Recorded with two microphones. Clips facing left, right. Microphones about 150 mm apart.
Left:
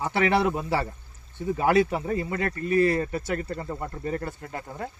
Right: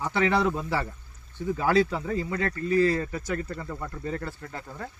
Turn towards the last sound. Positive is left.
turn(degrees=20)  # may be behind; listen again after turning